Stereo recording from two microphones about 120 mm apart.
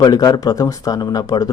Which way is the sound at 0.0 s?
35° left (ahead or behind).